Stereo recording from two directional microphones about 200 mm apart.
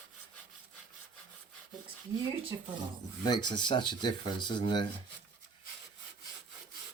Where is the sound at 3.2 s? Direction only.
20° left (ahead or behind).